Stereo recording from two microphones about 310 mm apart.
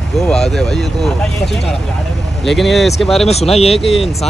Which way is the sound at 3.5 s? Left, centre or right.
Centre.